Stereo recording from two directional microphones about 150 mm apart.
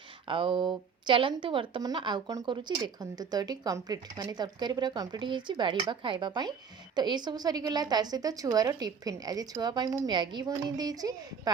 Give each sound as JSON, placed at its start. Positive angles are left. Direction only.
{"t": 0.3, "sound": "a woman's voice", "side_deg": -35}